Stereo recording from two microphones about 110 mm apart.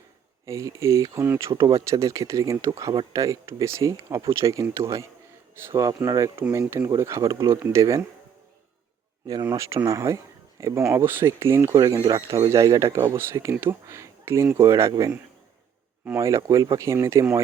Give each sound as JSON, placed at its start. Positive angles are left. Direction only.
{"t": 0.4, "sound": "speech", "side_deg": -30}
{"t": 9.2, "sound": "speech", "side_deg": -35}
{"t": 16.1, "sound": "speech", "side_deg": -25}